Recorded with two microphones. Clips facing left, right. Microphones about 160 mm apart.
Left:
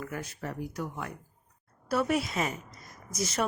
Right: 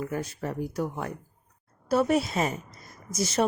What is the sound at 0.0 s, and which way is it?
A woman's voice, 25° right (ahead or behind).